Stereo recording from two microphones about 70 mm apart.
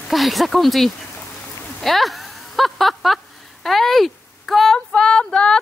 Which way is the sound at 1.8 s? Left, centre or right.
Centre.